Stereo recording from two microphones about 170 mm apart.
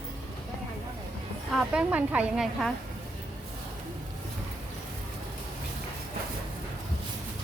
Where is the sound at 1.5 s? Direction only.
5° right (ahead or behind).